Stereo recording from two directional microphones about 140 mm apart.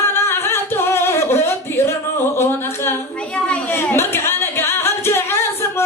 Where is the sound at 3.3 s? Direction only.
10° left (ahead or behind).